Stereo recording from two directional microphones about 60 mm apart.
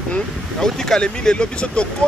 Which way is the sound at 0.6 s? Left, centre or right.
Centre.